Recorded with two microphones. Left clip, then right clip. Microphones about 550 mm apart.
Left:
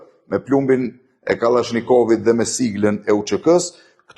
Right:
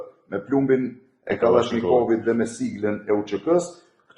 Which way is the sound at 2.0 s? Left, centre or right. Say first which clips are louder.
Left 6 dB; left.